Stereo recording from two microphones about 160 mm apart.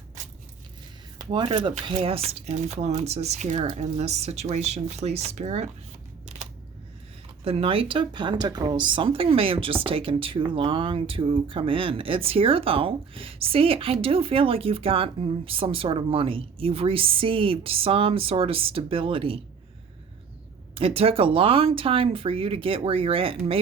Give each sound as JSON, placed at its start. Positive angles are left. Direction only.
{"t": 1.2, "sound": "speech", "side_deg": -30}
{"t": 7.4, "sound": "speech", "side_deg": -35}
{"t": 20.7, "sound": "speech", "side_deg": -35}